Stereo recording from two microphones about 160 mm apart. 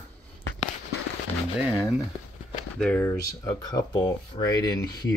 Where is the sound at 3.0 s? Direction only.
20° left (ahead or behind).